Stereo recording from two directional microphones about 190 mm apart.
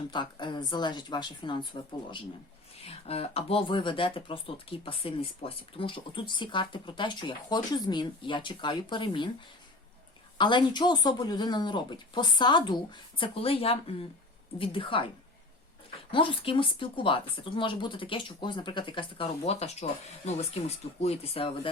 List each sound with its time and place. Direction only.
0.1 s speech: 25° left (ahead or behind)
10.3 s speech: 25° left (ahead or behind)
16.1 s speech: 30° left (ahead or behind)